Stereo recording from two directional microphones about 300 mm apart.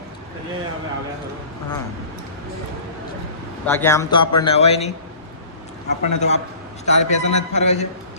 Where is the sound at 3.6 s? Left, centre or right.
Centre.